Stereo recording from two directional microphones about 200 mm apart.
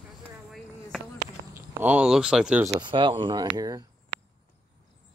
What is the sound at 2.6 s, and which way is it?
Speech, 20° right (ahead or behind).